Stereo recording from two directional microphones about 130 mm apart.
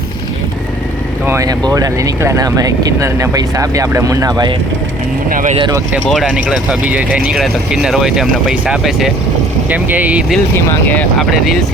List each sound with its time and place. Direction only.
1.3 s speech: 25° right (ahead or behind)
5.3 s speech: 90° right
6.1 s speech: 5° left (ahead or behind)
6.3 s speech: 5° right (ahead or behind)
10.5 s speech: 15° left (ahead or behind)
11.2 s speech: centre (ahead or behind)